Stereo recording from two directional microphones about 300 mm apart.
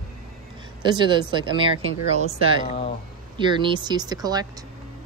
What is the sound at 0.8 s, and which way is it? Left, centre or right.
Speech, centre.